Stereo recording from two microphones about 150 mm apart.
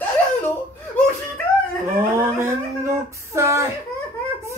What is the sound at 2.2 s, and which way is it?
Speech, 20° right (ahead or behind).